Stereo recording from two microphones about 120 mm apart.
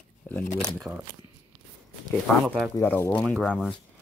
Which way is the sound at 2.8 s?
15° left (ahead or behind).